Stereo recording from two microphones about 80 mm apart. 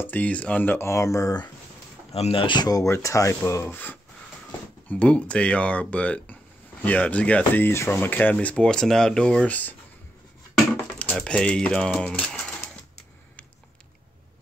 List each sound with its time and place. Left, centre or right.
0.0 s speech: centre
0.8 s speech: left
2.3 s speech: left
2.7 s speech: left
3.6 s speech: left
11.0 s speech: centre